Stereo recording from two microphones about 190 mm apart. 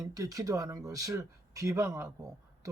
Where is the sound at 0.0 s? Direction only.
20° right (ahead or behind).